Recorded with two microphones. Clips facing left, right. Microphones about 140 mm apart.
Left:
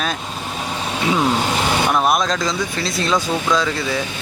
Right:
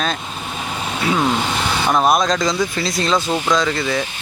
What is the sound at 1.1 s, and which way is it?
Vehicle, centre (ahead or behind).